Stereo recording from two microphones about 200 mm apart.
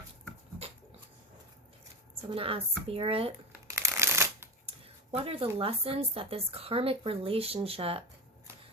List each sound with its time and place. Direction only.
2.2 s speech: 25° right (ahead or behind)
3.7 s shuffling cards: 15° right (ahead or behind)
5.1 s speech: 30° right (ahead or behind)